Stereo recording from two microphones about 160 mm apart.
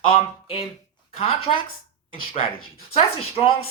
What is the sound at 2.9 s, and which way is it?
Speech, 35° left (ahead or behind).